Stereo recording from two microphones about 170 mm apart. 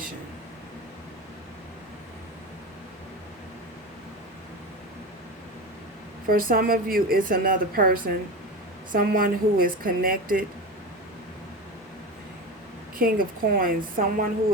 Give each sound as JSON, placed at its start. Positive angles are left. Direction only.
{"t": 6.2, "sound": "a woman's voice", "side_deg": -60}
{"t": 13.0, "sound": "a woman's voice", "side_deg": -60}